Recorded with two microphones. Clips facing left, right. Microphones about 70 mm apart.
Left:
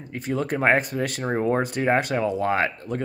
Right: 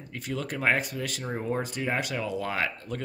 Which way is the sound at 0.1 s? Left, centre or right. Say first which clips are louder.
Left 7 dB; left.